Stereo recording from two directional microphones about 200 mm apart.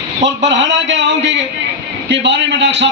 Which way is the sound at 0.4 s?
65° right (ahead or behind).